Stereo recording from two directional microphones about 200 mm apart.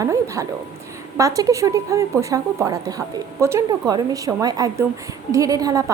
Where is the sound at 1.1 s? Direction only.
15° right (ahead or behind).